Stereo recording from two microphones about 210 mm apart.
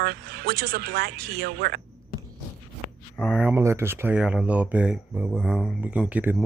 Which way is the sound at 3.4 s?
10° right (ahead or behind).